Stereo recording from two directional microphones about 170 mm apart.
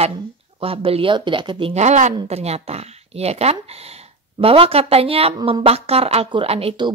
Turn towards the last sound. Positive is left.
turn(degrees=-35)  # may be behind; listen again after turning